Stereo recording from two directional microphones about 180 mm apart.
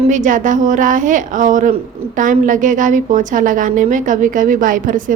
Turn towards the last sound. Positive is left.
turn(degrees=-45)  # may be behind; listen again after turning